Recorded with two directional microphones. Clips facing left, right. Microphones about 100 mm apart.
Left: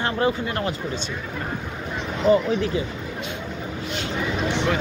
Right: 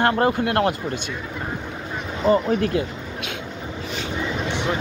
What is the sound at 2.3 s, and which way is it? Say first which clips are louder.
Speech: even; 50° right (ahead or behind).